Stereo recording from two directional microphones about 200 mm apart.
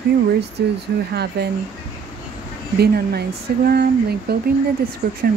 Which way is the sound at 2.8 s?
55° right (ahead or behind).